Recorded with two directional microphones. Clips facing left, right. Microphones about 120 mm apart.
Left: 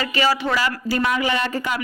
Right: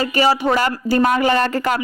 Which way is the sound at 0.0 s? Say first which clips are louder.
Right 4 dB; 40° right (ahead or behind).